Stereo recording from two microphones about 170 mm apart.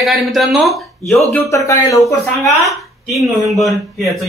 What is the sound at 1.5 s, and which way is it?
Speech, 20° left (ahead or behind).